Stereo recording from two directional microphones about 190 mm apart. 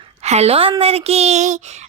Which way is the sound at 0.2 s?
35° right (ahead or behind).